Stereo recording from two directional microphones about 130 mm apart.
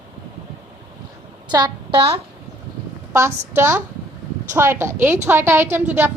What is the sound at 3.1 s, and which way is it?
A woman's voice, 20° right (ahead or behind).